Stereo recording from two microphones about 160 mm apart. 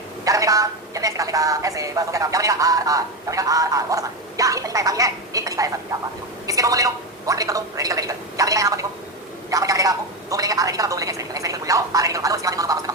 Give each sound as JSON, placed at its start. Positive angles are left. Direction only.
{"t": 0.3, "sound": "a woman's voice", "side_deg": -20}